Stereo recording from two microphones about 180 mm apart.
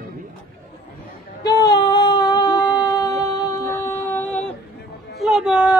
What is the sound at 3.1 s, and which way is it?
Music, 20° left (ahead or behind).